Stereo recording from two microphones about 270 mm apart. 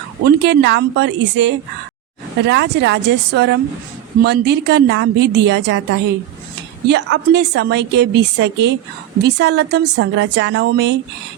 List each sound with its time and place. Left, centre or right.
0.3 s a woman's voice: right